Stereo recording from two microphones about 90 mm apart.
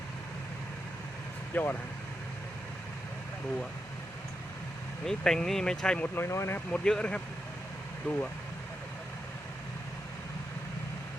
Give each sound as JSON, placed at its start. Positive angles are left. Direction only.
{"t": 1.5, "sound": "speech", "side_deg": 20}
{"t": 5.0, "sound": "speech", "side_deg": 5}
{"t": 6.1, "sound": "speech", "side_deg": 30}
{"t": 6.7, "sound": "speech", "side_deg": 10}